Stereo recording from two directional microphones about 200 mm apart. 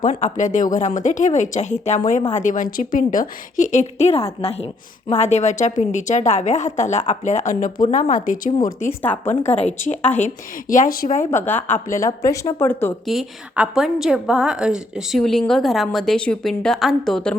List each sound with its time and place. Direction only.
0.0 s a woman's voice: 40° left (ahead or behind)
9.0 s a woman's voice: 10° left (ahead or behind)
9.6 s a woman's voice: 35° left (ahead or behind)
11.3 s a woman's voice: 10° left (ahead or behind)
13.1 s a woman's voice: centre (ahead or behind)